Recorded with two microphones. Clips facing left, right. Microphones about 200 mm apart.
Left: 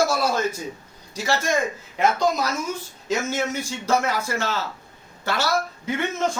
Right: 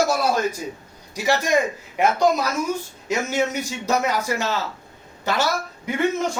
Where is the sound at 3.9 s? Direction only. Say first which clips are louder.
Right 1 dB; 15° right (ahead or behind).